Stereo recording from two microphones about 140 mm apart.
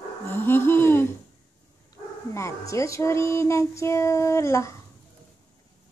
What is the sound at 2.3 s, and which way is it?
Speech, 20° left (ahead or behind).